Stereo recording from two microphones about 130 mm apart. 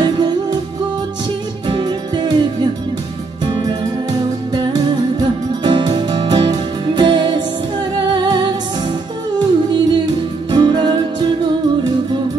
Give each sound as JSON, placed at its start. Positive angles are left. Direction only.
{"t": 0.0, "sound": "music", "side_deg": -35}
{"t": 1.7, "sound": "music", "side_deg": -35}
{"t": 3.4, "sound": "music", "side_deg": -35}